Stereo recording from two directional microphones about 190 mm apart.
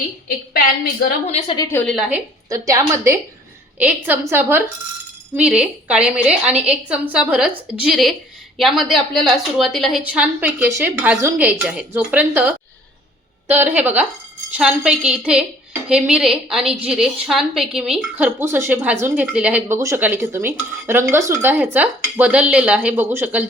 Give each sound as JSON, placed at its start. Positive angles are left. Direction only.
{"t": 1.3, "sound": "a woman's voice", "side_deg": 30}
{"t": 1.9, "sound": "a woman's voice", "side_deg": -5}
{"t": 2.5, "sound": "a woman's voice", "side_deg": -15}